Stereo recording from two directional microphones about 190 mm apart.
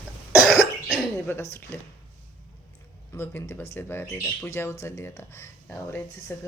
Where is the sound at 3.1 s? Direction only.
10° left (ahead or behind).